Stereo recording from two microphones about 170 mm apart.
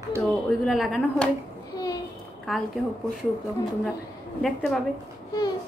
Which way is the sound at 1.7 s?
20° left (ahead or behind).